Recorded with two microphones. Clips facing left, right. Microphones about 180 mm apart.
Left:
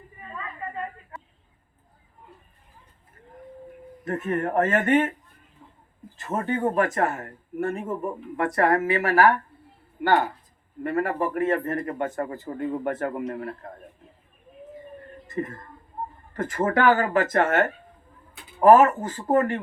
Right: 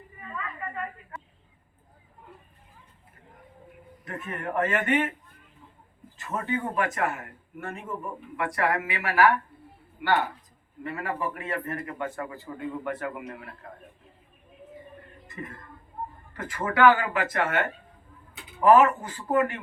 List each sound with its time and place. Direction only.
0.3 s a sound: 25° left (ahead or behind)
4.0 s a man's voice: 40° left (ahead or behind)
6.1 s a man's voice: 40° left (ahead or behind)
15.3 s a man's voice: 45° left (ahead or behind)